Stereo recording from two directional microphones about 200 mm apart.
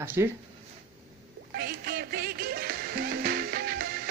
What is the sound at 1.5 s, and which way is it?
Music, 50° right (ahead or behind).